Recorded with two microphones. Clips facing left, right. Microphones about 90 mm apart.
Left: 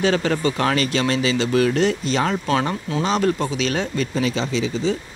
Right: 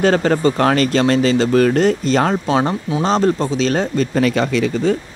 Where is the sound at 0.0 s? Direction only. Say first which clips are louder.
Right 5 dB; 40° right (ahead or behind).